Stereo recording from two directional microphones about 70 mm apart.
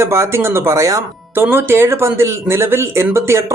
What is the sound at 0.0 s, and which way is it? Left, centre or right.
Speech, right.